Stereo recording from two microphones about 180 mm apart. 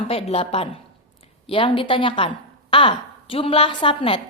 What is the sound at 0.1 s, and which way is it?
A woman's voice, 30° left (ahead or behind).